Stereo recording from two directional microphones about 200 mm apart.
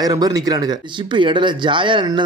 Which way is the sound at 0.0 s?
20° right (ahead or behind).